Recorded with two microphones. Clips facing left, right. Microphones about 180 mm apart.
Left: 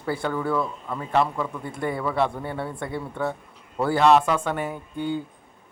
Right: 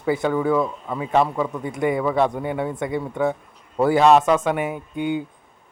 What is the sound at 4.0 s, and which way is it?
Speech, 15° right (ahead or behind).